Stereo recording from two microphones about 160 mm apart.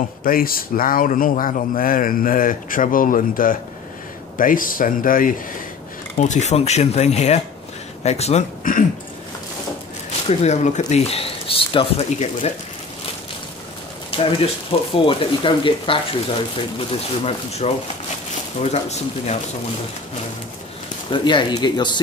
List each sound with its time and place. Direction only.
0.2 s speech: 65° left (ahead or behind)
6.1 s speech: 50° left (ahead or behind)
10.4 s speech: 45° left (ahead or behind)
14.1 s speech: 35° left (ahead or behind)
17.2 s speech: 40° left (ahead or behind)
21.1 s speech: 30° left (ahead or behind)